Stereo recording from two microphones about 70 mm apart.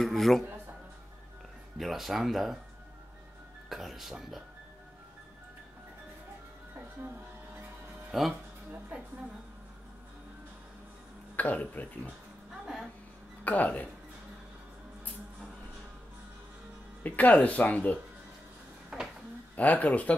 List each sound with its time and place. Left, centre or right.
0.0 s speech: centre
1.8 s speech: centre
3.6 s speech: centre
8.1 s speech: centre
11.3 s speech: left
13.4 s speech: left
17.0 s speech: left
18.9 s a sound: centre
19.5 s speech: left